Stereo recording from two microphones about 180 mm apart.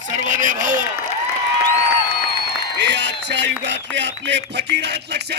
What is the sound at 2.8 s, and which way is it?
Speech, 75° right (ahead or behind).